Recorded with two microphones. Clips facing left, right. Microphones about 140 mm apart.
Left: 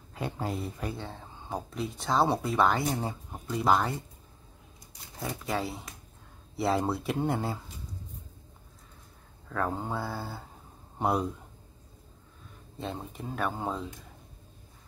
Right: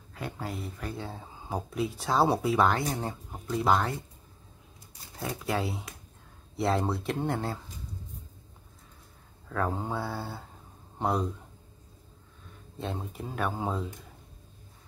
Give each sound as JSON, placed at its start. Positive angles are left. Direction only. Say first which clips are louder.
{"t": 0.1, "sound": "speech", "louder": "left 3 dB", "side_deg": 25}
{"t": 0.9, "sound": "speech", "louder": "right 2 dB", "side_deg": -5}
{"t": 5.2, "sound": "speech", "louder": "right 1 dB", "side_deg": 0}
{"t": 9.5, "sound": "speech", "louder": "right 1 dB", "side_deg": 0}
{"t": 12.7, "sound": "speech", "louder": "right 1 dB", "side_deg": 0}